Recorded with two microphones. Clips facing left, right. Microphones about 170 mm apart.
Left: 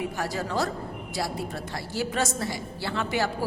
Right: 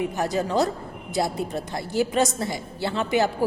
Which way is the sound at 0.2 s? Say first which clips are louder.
Right 6 dB; 20° right (ahead or behind).